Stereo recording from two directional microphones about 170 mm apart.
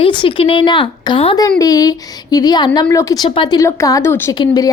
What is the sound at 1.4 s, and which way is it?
A woman's voice, 20° left (ahead or behind).